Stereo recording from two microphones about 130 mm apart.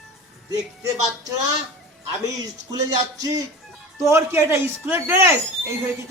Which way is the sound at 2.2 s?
30° right (ahead or behind).